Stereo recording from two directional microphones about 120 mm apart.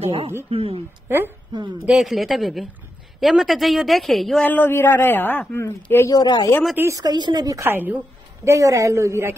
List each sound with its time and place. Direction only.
0.0 s speech: 50° right (ahead or behind)
1.0 s a woman's voice: 20° right (ahead or behind)
1.5 s a woman's voice: 40° right (ahead or behind)
1.9 s a woman's voice: centre (ahead or behind)
4.5 s speech: 15° left (ahead or behind)
6.1 s speech: 35° left (ahead or behind)
6.8 s a woman's voice: 30° right (ahead or behind)
7.6 s a woman's voice: 15° right (ahead or behind)
8.5 s a woman's voice: 25° right (ahead or behind)